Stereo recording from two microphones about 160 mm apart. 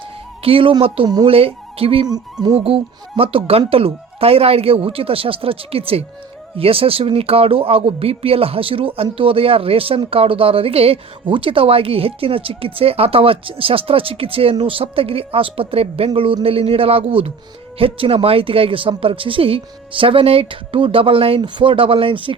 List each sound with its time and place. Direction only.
0.4 s speech: 35° right (ahead or behind)
2.1 s speech: 25° right (ahead or behind)